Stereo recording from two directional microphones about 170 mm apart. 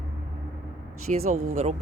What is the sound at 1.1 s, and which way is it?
Speech, 45° right (ahead or behind).